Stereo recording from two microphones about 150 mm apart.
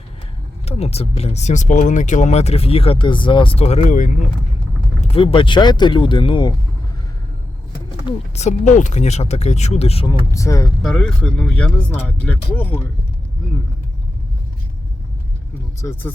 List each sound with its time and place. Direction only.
0.6 s speech: 45° left (ahead or behind); by 4.3 s 60° left (ahead or behind)
4.9 s speech: 40° left (ahead or behind)
8.4 s speech: 50° left (ahead or behind)
10.3 s speech: 20° left (ahead or behind)
10.8 s speech: 5° left (ahead or behind)
15.9 s speech: 10° left (ahead or behind)